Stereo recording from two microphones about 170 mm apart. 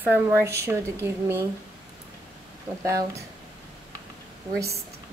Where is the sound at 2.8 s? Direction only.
20° right (ahead or behind).